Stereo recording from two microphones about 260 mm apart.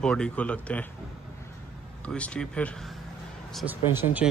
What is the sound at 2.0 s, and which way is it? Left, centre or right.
Speech, centre.